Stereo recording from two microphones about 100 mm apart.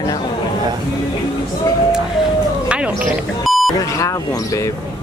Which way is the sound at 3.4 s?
Centre (ahead or behind).